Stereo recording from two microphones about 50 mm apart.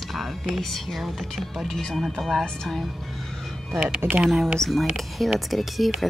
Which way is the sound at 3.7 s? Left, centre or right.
Centre.